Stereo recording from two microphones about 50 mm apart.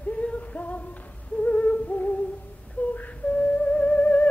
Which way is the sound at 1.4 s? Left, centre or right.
Left.